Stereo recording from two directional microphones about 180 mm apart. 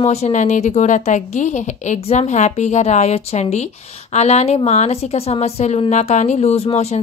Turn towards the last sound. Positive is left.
turn(degrees=35)  # may be behind; listen again after turning